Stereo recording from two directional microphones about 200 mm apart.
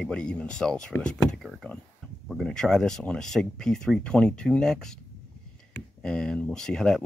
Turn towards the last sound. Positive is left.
turn(degrees=5)  # may be behind; listen again after turning